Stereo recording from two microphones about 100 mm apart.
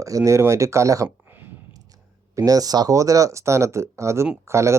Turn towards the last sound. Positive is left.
turn(degrees=-30)  # may be behind; listen again after turning